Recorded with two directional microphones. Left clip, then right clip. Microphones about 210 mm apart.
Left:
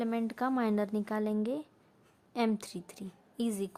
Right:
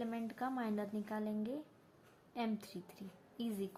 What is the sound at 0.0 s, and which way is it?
A woman's voice, 45° left (ahead or behind).